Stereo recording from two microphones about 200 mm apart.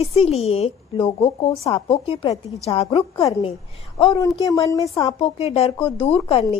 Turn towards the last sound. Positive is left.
turn(degrees=30)  # may be behind; listen again after turning